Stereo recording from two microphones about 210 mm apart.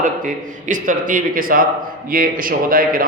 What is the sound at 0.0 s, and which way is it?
A man's voice, 40° right (ahead or behind).